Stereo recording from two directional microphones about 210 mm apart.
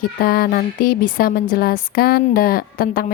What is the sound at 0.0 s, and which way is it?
Speech, 45° left (ahead or behind).